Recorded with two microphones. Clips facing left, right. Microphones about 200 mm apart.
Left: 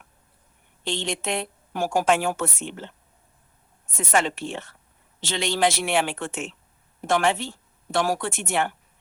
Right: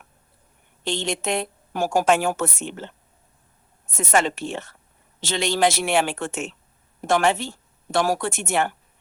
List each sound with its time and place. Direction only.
0.9 s a woman's voice: 40° right (ahead or behind)